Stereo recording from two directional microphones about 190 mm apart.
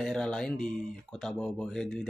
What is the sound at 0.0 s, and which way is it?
Speech, 5° left (ahead or behind).